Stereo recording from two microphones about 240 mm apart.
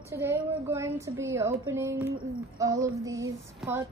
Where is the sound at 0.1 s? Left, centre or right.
Centre.